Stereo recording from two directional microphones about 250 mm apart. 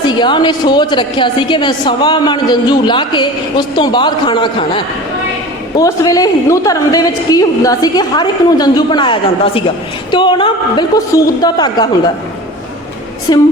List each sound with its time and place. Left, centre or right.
0.0 s a woman's voice: centre
13.3 s a woman's voice: centre